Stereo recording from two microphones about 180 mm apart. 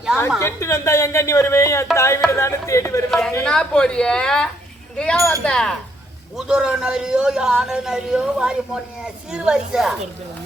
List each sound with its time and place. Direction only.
0.3 s speech: 15° left (ahead or behind)
3.1 s a man's voice: 5° left (ahead or behind)